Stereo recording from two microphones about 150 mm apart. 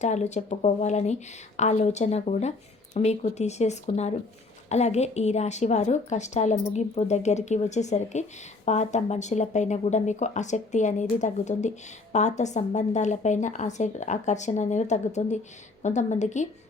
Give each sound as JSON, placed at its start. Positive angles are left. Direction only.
{"t": 0.0, "sound": "a woman's voice", "side_deg": 50}